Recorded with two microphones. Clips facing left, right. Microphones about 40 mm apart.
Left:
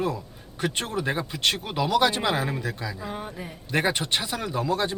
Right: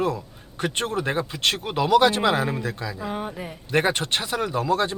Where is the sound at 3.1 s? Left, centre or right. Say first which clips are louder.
Right 4 dB; centre.